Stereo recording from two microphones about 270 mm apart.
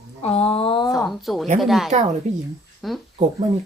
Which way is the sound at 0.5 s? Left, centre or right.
Centre.